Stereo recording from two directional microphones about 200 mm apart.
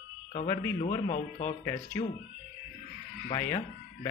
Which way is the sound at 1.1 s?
40° left (ahead or behind).